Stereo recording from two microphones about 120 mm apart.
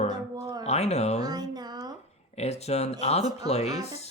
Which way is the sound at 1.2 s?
35° right (ahead or behind).